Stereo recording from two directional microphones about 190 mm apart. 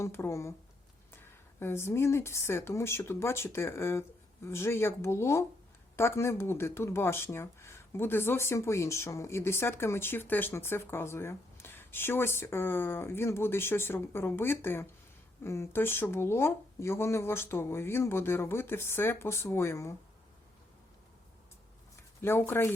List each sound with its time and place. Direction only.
0.0 s speech: 15° left (ahead or behind)
22.2 s speech: 10° left (ahead or behind)